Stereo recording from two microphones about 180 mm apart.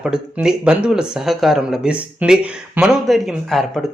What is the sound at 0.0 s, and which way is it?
Speech, 5° right (ahead or behind).